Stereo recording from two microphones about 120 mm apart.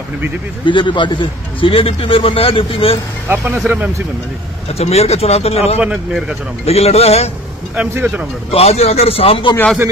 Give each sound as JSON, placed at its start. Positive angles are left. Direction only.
{"t": 0.7, "sound": "a man's voice", "side_deg": 40}
{"t": 3.5, "sound": "speech", "side_deg": -10}
{"t": 4.7, "sound": "speech", "side_deg": 60}
{"t": 5.8, "sound": "speech", "side_deg": -5}
{"t": 6.6, "sound": "speech", "side_deg": 60}
{"t": 7.7, "sound": "speech", "side_deg": -10}
{"t": 8.5, "sound": "speech", "side_deg": 60}